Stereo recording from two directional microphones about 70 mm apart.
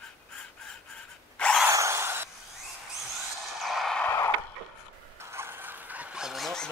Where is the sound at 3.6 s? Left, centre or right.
Centre.